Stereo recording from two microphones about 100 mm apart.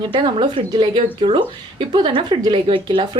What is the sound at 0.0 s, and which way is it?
Speech, 55° right (ahead or behind).